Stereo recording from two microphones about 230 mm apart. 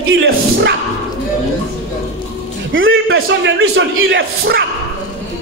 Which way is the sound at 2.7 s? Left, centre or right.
Right.